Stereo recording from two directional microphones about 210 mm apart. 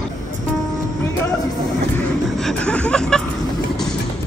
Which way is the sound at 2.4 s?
5° left (ahead or behind).